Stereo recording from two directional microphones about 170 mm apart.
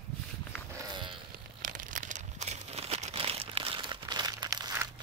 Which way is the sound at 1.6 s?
50° right (ahead or behind).